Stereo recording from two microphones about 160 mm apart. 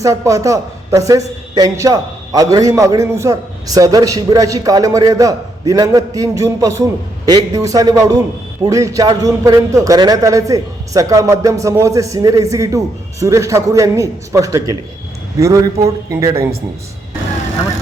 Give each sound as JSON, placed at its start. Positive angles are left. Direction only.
{"t": 0.0, "sound": "speech", "side_deg": -20}